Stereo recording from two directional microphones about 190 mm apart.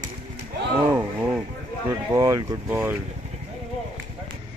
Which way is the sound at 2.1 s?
15° right (ahead or behind).